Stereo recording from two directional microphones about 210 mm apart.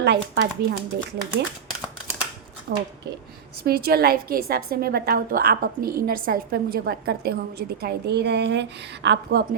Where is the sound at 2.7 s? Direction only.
50° right (ahead or behind).